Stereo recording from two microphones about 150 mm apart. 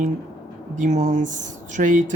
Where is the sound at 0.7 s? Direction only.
50° right (ahead or behind).